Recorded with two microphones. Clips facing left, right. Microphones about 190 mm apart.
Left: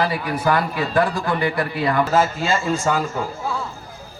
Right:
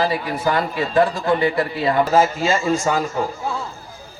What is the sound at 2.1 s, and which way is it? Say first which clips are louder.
Speech: right 2 dB; 40° right (ahead or behind).